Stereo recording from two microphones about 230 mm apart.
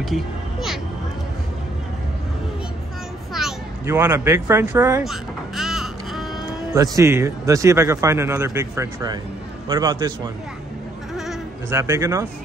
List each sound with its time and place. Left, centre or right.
0.0 s a sound: centre
3.8 s speech: centre
5.0 s music: centre
6.7 s speech: centre
11.7 s speech: centre